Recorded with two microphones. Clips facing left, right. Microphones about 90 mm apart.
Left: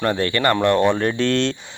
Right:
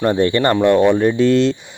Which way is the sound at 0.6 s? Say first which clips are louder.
Right 6 dB; 10° right (ahead or behind).